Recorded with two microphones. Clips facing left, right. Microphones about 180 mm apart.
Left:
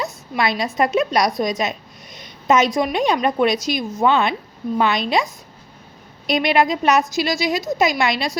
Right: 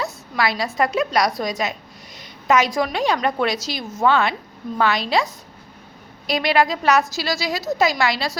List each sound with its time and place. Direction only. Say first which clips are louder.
0.0 s a woman's voice: left 1 dB; 20° left (ahead or behind)